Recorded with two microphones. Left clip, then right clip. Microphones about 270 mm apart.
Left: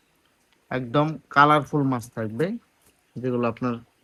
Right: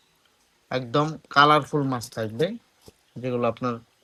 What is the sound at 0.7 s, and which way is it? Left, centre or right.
Speech, centre.